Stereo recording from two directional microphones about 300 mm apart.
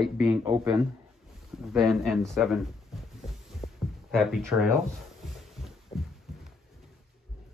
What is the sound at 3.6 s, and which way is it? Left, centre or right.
Heart sounds, centre.